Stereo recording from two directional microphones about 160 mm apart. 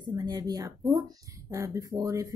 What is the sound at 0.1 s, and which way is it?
Speech, 25° right (ahead or behind).